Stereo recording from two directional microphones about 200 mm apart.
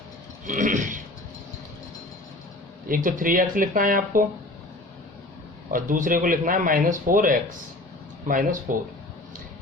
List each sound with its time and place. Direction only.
0.4 s burping: 40° right (ahead or behind)
2.8 s speech: 45° right (ahead or behind)
5.7 s speech: 40° right (ahead or behind)